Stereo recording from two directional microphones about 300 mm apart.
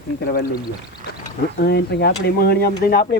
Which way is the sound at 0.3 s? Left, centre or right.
Left.